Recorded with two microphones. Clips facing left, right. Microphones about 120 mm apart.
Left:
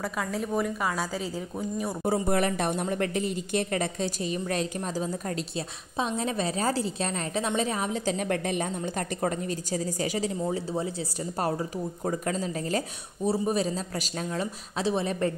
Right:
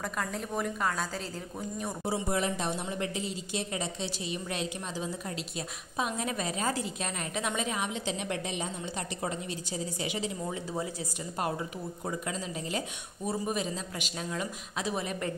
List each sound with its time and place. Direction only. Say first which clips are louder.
0.0 s a woman's voice: left 4 dB; centre (ahead or behind)
2.0 s a woman's voice: left 5 dB; 55° left (ahead or behind)
13.2 s a woman's voice: left 6 dB; 30° left (ahead or behind)